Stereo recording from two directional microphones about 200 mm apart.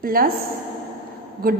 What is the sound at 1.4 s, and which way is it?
Speech, 45° right (ahead or behind).